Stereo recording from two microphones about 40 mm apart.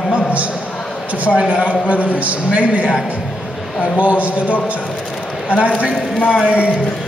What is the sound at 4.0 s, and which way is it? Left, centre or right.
Speech, right.